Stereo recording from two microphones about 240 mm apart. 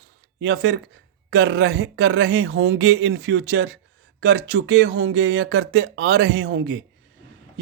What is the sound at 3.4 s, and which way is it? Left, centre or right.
Speech, right.